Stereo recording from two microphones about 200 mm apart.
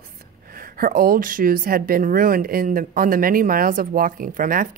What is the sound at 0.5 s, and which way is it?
Speech, 45° right (ahead or behind).